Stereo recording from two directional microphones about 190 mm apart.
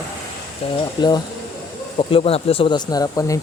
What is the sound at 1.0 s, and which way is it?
Speech, 20° left (ahead or behind).